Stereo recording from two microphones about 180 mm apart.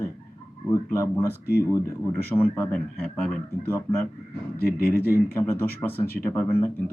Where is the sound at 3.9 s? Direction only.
15° left (ahead or behind).